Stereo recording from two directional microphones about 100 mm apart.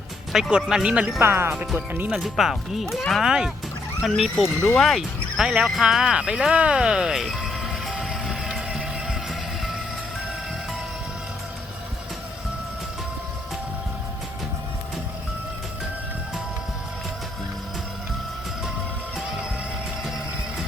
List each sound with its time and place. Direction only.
0.5 s speech: 10° right (ahead or behind)
1.2 s speech: 25° right (ahead or behind)
2.0 s speech: centre (ahead or behind)
4.8 s a sound: centre (ahead or behind)